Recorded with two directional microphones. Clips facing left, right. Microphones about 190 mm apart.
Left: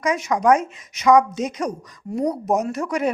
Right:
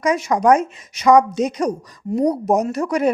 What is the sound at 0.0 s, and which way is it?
A woman's voice, 35° right (ahead or behind).